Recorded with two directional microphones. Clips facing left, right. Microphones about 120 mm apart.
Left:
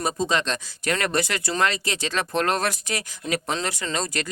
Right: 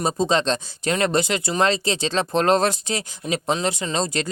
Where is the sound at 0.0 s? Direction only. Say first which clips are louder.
Right 4 dB; 30° right (ahead or behind).